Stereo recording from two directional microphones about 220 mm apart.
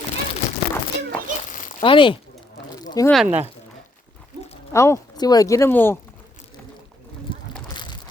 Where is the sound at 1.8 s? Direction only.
20° left (ahead or behind).